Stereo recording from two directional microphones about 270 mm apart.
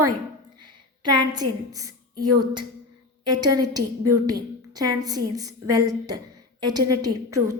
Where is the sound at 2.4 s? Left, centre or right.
Centre.